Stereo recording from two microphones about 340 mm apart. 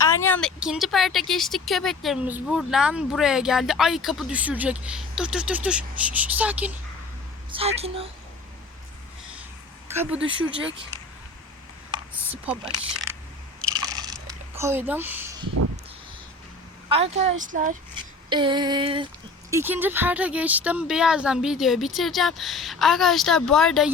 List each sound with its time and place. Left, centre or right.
0.0 s speech: centre
7.5 s a sound: centre
9.9 s speech: centre
11.9 s a sound: centre
13.7 s biting: centre
14.5 s speech: centre
16.9 s speech: centre
18.3 s a sound: centre
19.5 s speech: centre